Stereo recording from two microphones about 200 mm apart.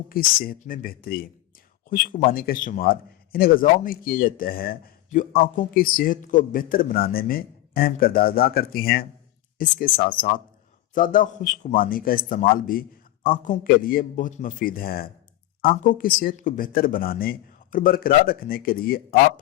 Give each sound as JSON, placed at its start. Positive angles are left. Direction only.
{"t": 0.1, "sound": "a man's voice", "side_deg": 45}